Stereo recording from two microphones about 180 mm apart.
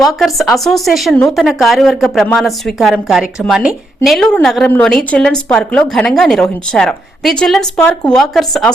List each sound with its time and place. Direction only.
0.2 s speech: centre (ahead or behind)